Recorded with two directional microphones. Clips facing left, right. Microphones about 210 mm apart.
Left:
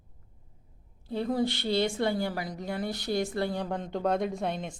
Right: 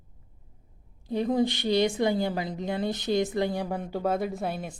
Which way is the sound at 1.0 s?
15° right (ahead or behind).